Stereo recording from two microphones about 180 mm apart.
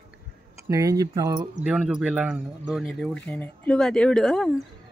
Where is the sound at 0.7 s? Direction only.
20° right (ahead or behind).